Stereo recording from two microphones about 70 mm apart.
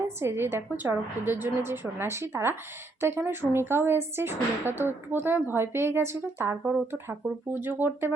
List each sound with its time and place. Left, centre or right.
0.2 s speech: right